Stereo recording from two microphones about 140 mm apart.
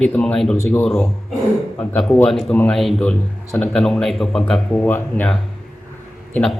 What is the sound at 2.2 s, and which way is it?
A man's voice, centre (ahead or behind).